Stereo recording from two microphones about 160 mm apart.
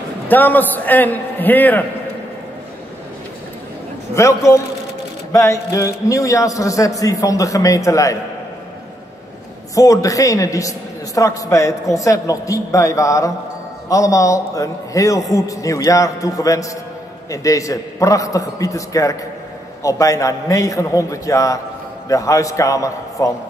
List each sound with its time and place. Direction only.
0.3 s a man's voice: 10° left (ahead or behind)
4.1 s a man's voice: 20° left (ahead or behind)
9.8 s a man's voice: 20° left (ahead or behind)